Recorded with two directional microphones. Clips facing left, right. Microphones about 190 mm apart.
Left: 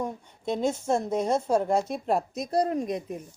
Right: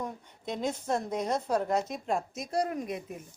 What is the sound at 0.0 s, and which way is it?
A woman's voice, 30° left (ahead or behind).